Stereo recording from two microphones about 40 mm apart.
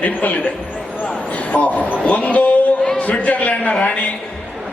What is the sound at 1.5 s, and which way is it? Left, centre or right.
A man's voice, left.